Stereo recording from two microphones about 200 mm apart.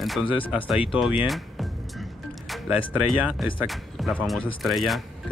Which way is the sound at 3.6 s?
Centre (ahead or behind).